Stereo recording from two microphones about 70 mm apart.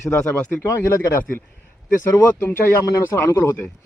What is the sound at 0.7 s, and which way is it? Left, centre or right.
Speech, left.